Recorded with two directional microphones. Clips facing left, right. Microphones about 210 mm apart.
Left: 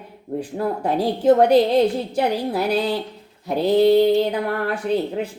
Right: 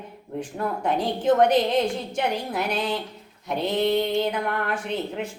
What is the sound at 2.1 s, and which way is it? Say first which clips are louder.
Speech: left 5 dB; 35° left (ahead or behind).